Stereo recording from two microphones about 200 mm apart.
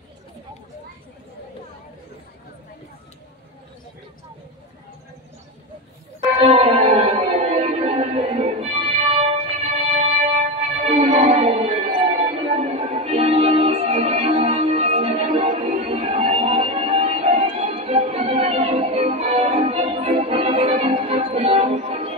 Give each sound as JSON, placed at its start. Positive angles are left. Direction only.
{"t": 6.4, "sound": "music", "side_deg": -30}